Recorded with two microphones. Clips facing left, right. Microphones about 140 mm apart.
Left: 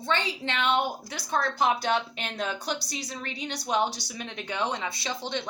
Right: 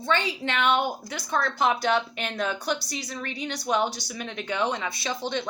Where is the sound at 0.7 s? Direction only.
20° left (ahead or behind).